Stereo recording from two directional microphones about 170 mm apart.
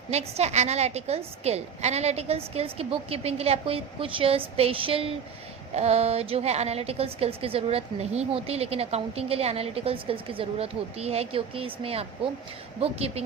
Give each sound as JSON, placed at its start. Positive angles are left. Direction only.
{"t": 0.1, "sound": "a woman's voice", "side_deg": -40}